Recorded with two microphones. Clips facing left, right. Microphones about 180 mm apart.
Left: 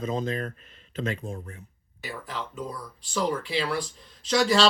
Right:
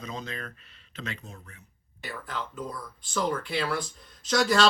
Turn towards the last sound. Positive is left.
turn(degrees=5)  # may be behind; listen again after turning